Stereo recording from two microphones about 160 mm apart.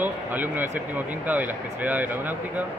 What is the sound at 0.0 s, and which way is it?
Speech, 10° right (ahead or behind).